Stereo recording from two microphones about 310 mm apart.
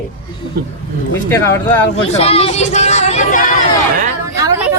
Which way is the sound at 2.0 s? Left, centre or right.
Centre.